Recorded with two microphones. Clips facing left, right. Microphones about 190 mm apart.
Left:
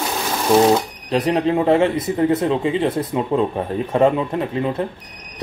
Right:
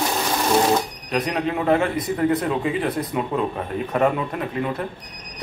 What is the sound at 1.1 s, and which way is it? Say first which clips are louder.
Speech: left 6 dB; 30° left (ahead or behind).